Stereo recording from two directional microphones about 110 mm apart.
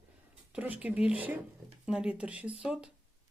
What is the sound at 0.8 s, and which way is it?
Speech, 10° right (ahead or behind).